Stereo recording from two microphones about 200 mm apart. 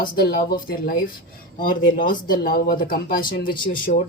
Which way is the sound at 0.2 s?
45° left (ahead or behind).